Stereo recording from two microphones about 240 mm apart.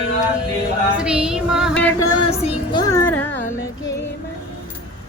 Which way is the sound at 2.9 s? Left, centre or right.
Centre.